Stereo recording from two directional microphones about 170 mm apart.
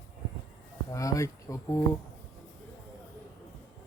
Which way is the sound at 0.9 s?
20° left (ahead or behind).